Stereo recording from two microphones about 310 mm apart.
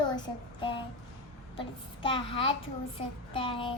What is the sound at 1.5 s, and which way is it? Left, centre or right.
A child's voice, centre.